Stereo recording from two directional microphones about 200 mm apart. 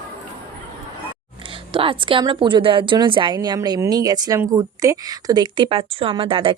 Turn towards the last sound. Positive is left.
turn(degrees=-25)  # may be behind; listen again after turning